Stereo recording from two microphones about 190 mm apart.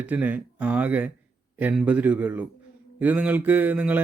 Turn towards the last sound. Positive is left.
turn(degrees=-10)  # may be behind; listen again after turning